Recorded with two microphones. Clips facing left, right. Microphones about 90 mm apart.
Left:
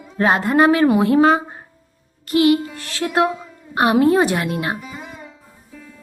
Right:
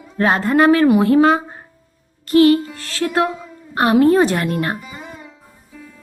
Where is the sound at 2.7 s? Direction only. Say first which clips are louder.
Right 1 dB; 20° left (ahead or behind); by 5.9 s centre (ahead or behind).